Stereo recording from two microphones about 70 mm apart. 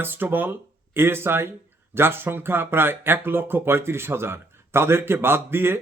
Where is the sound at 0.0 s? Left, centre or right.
Right.